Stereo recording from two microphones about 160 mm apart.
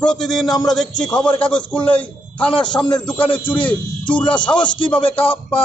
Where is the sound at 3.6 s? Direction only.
5° left (ahead or behind).